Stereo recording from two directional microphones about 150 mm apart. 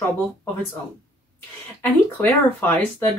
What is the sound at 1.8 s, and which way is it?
Speech, 15° left (ahead or behind).